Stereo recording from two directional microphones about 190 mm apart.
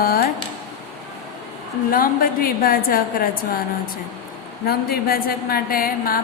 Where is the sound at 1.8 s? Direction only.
50° left (ahead or behind).